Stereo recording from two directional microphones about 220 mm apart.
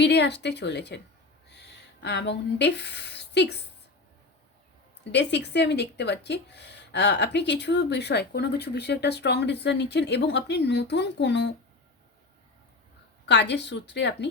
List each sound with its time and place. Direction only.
0.0 s speech: 50° left (ahead or behind)
5.1 s speech: 50° left (ahead or behind)
13.2 s speech: 50° left (ahead or behind)